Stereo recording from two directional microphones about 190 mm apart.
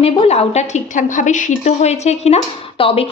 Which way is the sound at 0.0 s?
30° left (ahead or behind).